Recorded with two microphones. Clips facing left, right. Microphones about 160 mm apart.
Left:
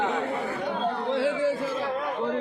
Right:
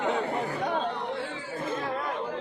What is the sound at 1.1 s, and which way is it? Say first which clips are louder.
Chatter: left 11 dB; 90° left.